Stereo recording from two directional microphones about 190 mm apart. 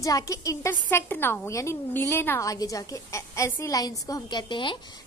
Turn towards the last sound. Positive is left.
turn(degrees=25)  # may be behind; listen again after turning